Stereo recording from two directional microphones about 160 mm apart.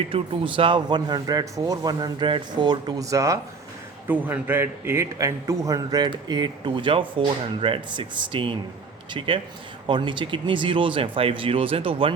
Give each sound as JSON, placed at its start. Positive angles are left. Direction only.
{"t": 0.1, "sound": "a man's voice", "side_deg": -35}